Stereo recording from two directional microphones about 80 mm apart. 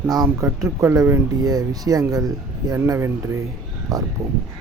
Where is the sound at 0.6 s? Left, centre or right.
Right.